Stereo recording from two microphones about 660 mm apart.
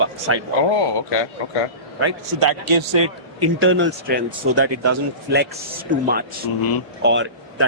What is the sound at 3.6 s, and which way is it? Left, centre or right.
Speech, centre.